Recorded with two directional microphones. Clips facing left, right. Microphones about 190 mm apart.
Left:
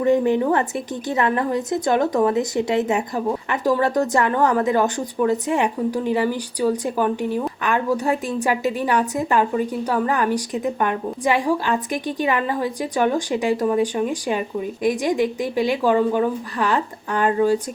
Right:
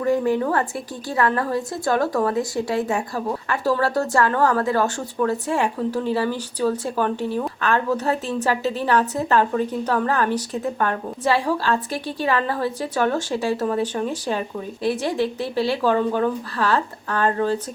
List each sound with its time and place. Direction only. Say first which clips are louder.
0.0 s a woman's voice: left 3 dB; 20° left (ahead or behind)